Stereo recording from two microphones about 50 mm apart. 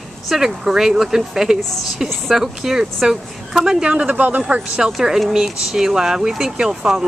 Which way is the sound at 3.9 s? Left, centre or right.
Right.